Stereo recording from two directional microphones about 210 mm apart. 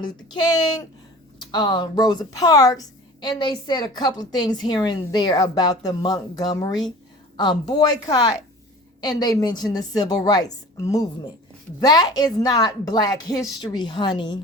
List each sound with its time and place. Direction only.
0.0 s a woman's voice: 20° left (ahead or behind)
11.8 s a woman's voice: 20° left (ahead or behind)